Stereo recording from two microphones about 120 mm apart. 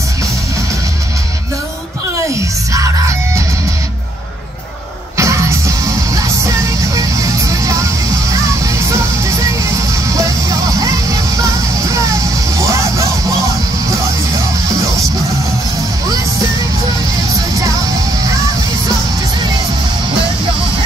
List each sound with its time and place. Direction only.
2.3 s music: 25° right (ahead or behind)
5.1 s music: 25° right (ahead or behind)